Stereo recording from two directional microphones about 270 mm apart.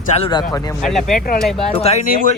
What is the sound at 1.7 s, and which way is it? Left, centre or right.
Speech, left.